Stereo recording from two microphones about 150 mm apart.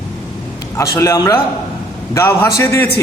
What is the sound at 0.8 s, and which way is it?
A man's voice, 20° left (ahead or behind).